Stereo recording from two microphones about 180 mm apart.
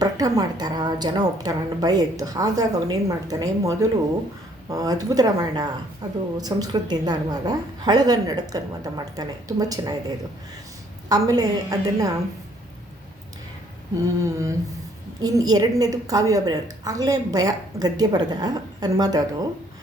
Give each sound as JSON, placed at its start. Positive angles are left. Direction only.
{"t": 0.0, "sound": "a woman's voice", "side_deg": -20}
{"t": 11.1, "sound": "a woman's voice", "side_deg": -20}
{"t": 14.3, "sound": "humming", "side_deg": -15}
{"t": 15.2, "sound": "a woman's voice", "side_deg": -20}